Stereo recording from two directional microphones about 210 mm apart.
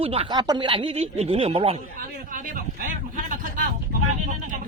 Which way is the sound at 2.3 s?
40° right (ahead or behind).